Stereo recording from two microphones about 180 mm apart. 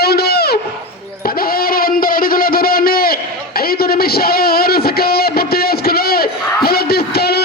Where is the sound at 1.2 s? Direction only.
55° left (ahead or behind).